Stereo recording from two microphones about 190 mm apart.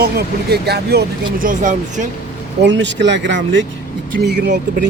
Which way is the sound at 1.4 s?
45° right (ahead or behind).